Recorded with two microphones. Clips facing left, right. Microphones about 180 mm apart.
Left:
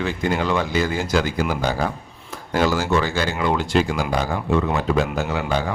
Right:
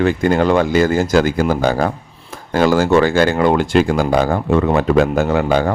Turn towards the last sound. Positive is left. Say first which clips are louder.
# right 8 dB
turn(degrees=-55)  # may be behind; listen again after turning